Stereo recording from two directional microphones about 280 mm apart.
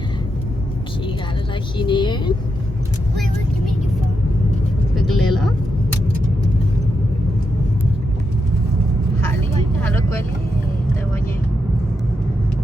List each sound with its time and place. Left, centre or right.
1.8 s speech: centre
4.9 s vehicle: centre
9.8 s vehicle: centre